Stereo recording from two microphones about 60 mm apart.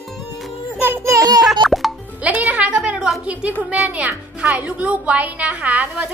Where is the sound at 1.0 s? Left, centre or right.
Right.